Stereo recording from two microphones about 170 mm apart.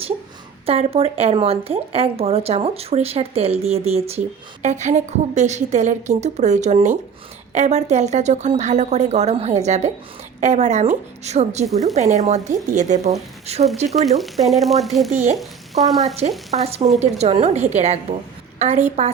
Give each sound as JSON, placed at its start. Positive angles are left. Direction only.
{"t": 0.6, "sound": "a woman's voice", "side_deg": -35}
{"t": 13.8, "sound": "speech", "side_deg": 0}
{"t": 15.1, "sound": "a woman's voice", "side_deg": -45}
{"t": 15.4, "sound": "speech", "side_deg": 0}
{"t": 16.5, "sound": "speech", "side_deg": -40}